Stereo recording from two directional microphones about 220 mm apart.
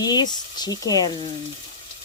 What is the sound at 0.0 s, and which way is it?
Speech, 20° left (ahead or behind).